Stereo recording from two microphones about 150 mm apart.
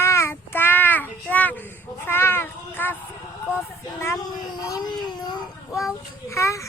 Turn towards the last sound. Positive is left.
turn(degrees=20)  # may be behind; listen again after turning